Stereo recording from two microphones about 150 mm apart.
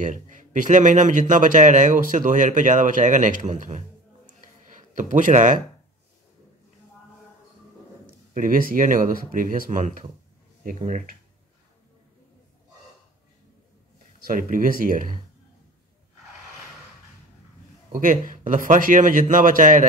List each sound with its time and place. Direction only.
0.0 s a man's voice: 60° right (ahead or behind)
4.9 s a man's voice: 60° right (ahead or behind)
8.4 s a man's voice: 70° right (ahead or behind)
14.2 s speech: 65° right (ahead or behind)
17.9 s a man's voice: 65° right (ahead or behind)